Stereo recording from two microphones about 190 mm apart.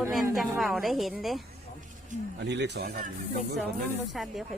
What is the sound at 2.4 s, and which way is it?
Speech, 65° right (ahead or behind).